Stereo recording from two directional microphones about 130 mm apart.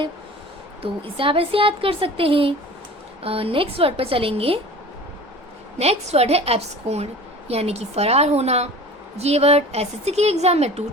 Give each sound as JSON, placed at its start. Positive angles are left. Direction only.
{"t": 0.8, "sound": "a woman's voice", "side_deg": -45}
{"t": 5.8, "sound": "a woman's voice", "side_deg": -55}